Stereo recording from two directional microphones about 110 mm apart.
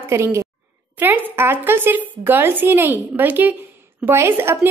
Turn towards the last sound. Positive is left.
turn(degrees=-20)  # may be behind; listen again after turning